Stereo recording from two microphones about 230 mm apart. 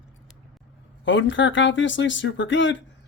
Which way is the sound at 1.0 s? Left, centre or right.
Left.